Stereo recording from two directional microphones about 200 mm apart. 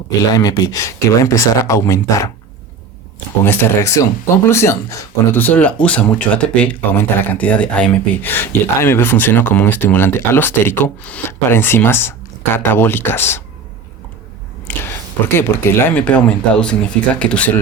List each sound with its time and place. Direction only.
0.2 s speech: 20° left (ahead or behind)
3.4 s speech: 10° left (ahead or behind)
14.7 s a sound: 10° left (ahead or behind)
15.4 s speech: 10° left (ahead or behind)